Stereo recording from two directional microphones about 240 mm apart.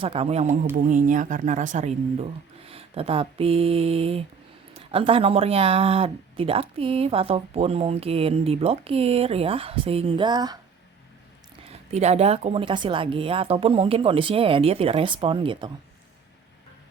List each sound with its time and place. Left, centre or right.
0.0 s speech: right
11.9 s speech: right